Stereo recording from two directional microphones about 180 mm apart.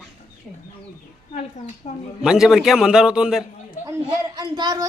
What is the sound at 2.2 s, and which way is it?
A man's voice, 5° right (ahead or behind).